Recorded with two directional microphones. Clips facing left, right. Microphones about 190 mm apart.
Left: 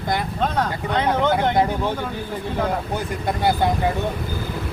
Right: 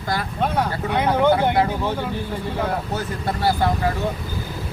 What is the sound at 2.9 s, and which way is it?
Speech, 20° left (ahead or behind).